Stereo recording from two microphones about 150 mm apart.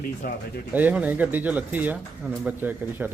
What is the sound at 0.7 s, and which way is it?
Speech, 10° right (ahead or behind).